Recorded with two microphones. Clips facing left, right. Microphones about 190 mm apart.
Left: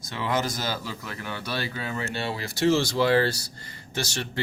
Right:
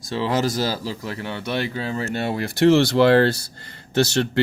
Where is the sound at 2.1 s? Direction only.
50° right (ahead or behind).